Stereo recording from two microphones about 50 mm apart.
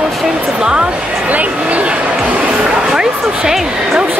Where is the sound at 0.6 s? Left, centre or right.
Centre.